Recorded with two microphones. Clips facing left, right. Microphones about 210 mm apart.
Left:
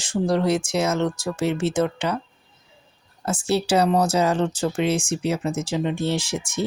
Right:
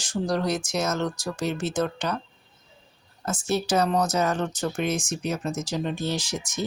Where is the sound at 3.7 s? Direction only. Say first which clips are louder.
Left 4 dB; 10° left (ahead or behind).